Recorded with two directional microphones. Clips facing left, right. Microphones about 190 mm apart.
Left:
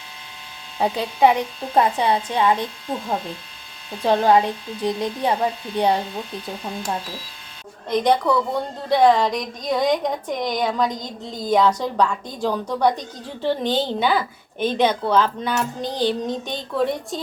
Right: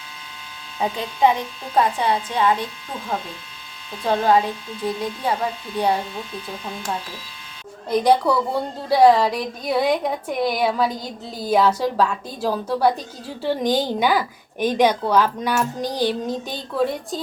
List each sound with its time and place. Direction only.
0.8 s speech: 15° left (ahead or behind)
4.0 s speech: 20° left (ahead or behind)
7.9 s a woman's voice: 10° right (ahead or behind)
15.1 s child singing: 10° right (ahead or behind)